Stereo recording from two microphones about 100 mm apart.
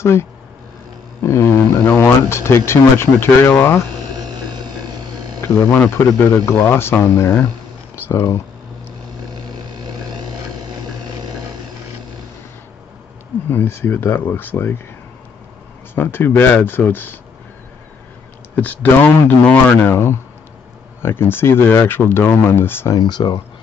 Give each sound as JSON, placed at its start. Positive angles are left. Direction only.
{"t": 0.0, "sound": "speech", "side_deg": 25}
{"t": 4.2, "sound": "a sound", "side_deg": -45}
{"t": 5.6, "sound": "speech", "side_deg": 20}
{"t": 9.8, "sound": "vehicle", "side_deg": -45}
{"t": 13.5, "sound": "speech", "side_deg": 20}
{"t": 15.9, "sound": "speech", "side_deg": 20}
{"t": 18.6, "sound": "speech", "side_deg": 15}
{"t": 22.9, "sound": "speech", "side_deg": 45}